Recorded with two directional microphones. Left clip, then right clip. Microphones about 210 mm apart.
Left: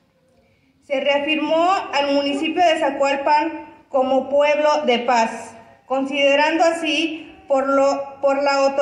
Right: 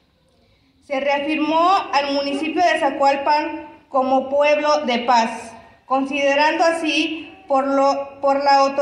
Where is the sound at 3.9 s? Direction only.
50° left (ahead or behind).